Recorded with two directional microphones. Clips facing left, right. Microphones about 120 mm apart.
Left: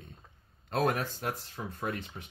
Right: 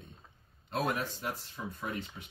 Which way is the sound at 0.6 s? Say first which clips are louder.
Left 4 dB; 50° left (ahead or behind).